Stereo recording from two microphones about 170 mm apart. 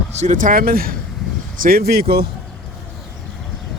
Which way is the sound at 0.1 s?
45° right (ahead or behind).